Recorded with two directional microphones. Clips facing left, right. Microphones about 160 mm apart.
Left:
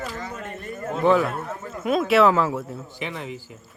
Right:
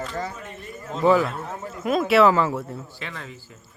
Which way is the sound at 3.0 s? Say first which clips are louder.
Left 5 dB; 15° left (ahead or behind).